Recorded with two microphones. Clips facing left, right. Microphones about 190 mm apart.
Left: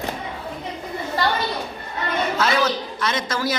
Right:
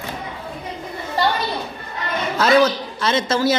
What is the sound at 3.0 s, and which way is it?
Speech, 30° right (ahead or behind).